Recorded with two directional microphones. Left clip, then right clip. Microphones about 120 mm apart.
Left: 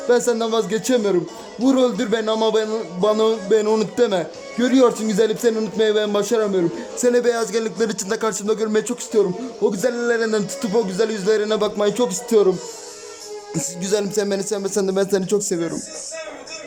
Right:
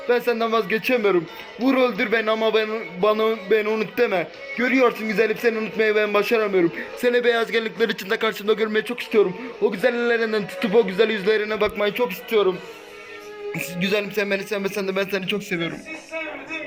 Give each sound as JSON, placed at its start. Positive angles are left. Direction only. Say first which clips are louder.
{"t": 0.1, "sound": "a man's voice", "louder": "left 2 dB", "side_deg": 30}
{"t": 1.6, "sound": "music", "louder": "left 2 dB", "side_deg": 30}
{"t": 3.7, "sound": "a man's voice", "louder": "left 3 dB", "side_deg": 35}
{"t": 5.7, "sound": "music", "louder": "left 1 dB", "side_deg": 25}
{"t": 6.6, "sound": "a man's voice", "louder": "even", "side_deg": 15}
{"t": 8.7, "sound": "music", "louder": "left 1 dB", "side_deg": 20}
{"t": 9.6, "sound": "a man's voice", "louder": "left 1 dB", "side_deg": 20}
{"t": 13.5, "sound": "a man's voice", "louder": "left 1 dB", "side_deg": 30}